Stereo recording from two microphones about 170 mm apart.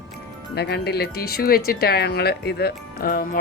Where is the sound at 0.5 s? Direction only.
75° left (ahead or behind).